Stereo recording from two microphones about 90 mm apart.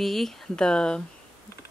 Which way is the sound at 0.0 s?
Centre (ahead or behind).